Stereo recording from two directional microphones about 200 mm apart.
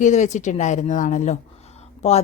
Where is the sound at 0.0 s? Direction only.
40° left (ahead or behind).